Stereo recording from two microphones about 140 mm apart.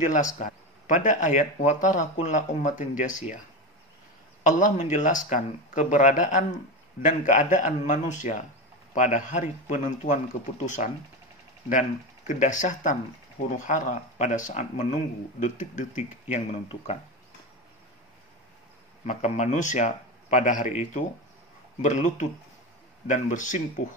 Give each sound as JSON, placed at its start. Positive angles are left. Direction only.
{"t": 0.0, "sound": "speech", "side_deg": 65}
{"t": 4.4, "sound": "speech", "side_deg": 65}
{"t": 12.3, "sound": "speech", "side_deg": 65}
{"t": 16.6, "sound": "speech", "side_deg": 45}
{"t": 19.0, "sound": "speech", "side_deg": 55}